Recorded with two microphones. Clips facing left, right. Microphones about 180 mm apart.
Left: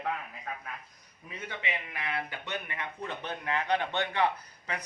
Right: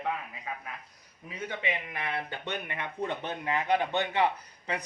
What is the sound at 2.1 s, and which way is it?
A man's voice, 25° right (ahead or behind).